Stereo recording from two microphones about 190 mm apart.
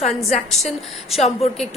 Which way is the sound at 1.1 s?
35° left (ahead or behind).